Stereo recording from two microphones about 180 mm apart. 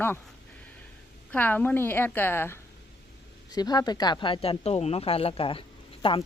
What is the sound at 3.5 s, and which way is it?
Speech, 20° left (ahead or behind).